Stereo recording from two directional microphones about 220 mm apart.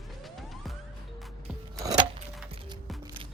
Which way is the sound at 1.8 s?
15° right (ahead or behind).